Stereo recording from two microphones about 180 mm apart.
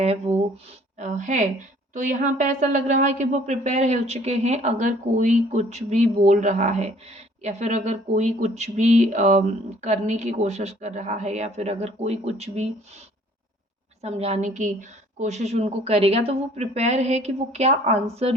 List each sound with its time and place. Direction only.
0.0 s a woman's voice: 35° right (ahead or behind)
14.0 s a woman's voice: 35° right (ahead or behind)